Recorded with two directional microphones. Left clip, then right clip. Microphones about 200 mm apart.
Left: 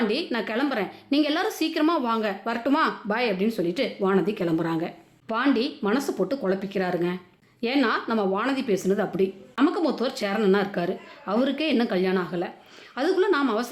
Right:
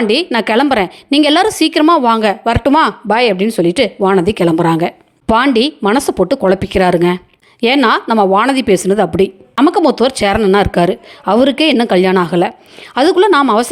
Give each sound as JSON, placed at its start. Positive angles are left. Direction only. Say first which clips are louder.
{"t": 0.1, "sound": "a woman's voice", "louder": "right 15 dB", "side_deg": -40}